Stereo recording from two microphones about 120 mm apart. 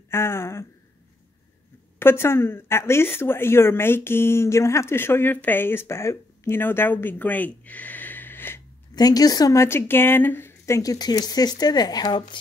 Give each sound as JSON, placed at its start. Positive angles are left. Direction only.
{"t": 0.1, "sound": "speech", "side_deg": 20}
{"t": 2.0, "sound": "speech", "side_deg": 20}
{"t": 8.9, "sound": "a woman's voice", "side_deg": 30}